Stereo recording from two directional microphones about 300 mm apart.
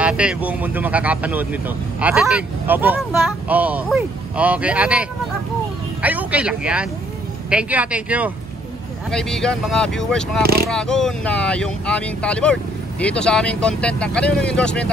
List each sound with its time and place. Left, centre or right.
0.0 s speech: centre
6.0 s speech: centre
10.4 s speech: right
10.7 s speech: centre